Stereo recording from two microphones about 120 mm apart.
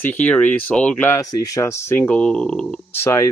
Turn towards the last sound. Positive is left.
turn(degrees=20)  # may be behind; listen again after turning